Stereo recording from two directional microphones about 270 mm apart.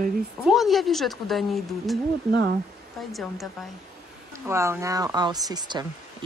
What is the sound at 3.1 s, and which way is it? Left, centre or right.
Speech, centre.